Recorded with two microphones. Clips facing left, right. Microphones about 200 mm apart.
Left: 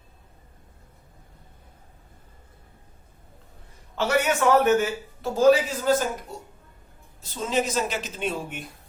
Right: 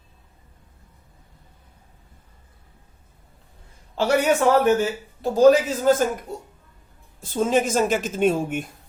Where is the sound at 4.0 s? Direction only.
30° right (ahead or behind).